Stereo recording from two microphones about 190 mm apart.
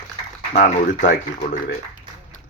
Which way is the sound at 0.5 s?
40° left (ahead or behind).